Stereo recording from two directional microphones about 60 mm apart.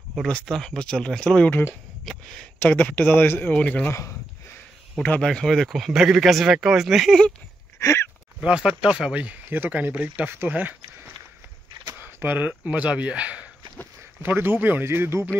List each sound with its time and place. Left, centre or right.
0.5 s speech: centre
2.6 s speech: left
3.6 s speech: left
5.2 s speech: centre
7.8 s a sound: left
8.4 s speech: centre
9.1 s speech: right
10.2 s speech: right
10.5 s speech: right
12.0 s speech: right
14.2 s speech: right